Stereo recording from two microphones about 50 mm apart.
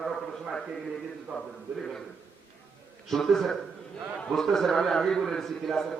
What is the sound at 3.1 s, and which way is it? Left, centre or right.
A man's voice, centre.